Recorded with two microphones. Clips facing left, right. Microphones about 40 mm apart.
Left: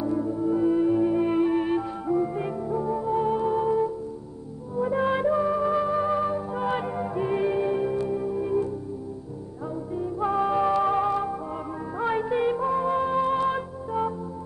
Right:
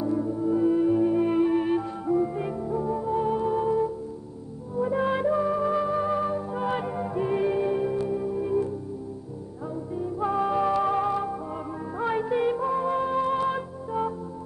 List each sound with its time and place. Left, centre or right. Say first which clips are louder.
0.0 s music: even; centre
9.9 s music: left 1 dB; centre